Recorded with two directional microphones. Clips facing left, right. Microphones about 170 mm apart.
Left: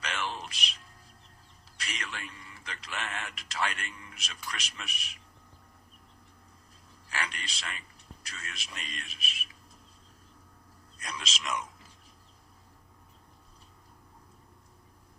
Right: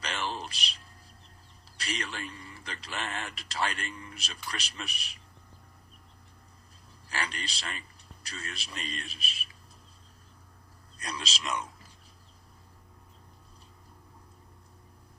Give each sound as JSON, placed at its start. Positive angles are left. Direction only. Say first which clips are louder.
{"t": 0.0, "sound": "music", "louder": "right 1 dB", "side_deg": -35}
{"t": 1.8, "sound": "a man's voice", "louder": "right 4 dB", "side_deg": -35}
{"t": 7.1, "sound": "a man's voice", "louder": "right 1 dB", "side_deg": -35}
{"t": 10.9, "sound": "speech", "louder": "right 2 dB", "side_deg": -35}